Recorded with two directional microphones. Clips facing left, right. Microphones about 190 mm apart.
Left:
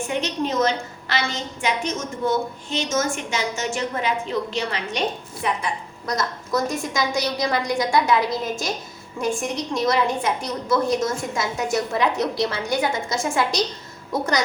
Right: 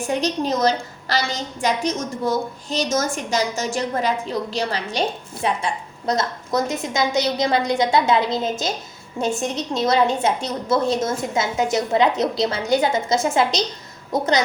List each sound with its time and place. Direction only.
0.1 s a woman's voice: 35° right (ahead or behind)